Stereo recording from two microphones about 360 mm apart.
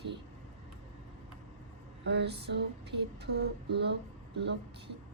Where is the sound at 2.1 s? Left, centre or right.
Right.